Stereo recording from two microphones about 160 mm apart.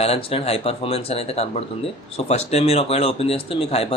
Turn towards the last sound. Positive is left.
turn(degrees=40)  # may be behind; listen again after turning